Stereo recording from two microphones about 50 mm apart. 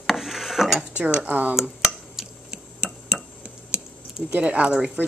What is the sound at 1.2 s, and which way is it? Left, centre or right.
Speech, right.